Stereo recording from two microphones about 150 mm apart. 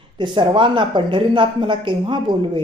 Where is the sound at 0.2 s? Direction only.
30° right (ahead or behind).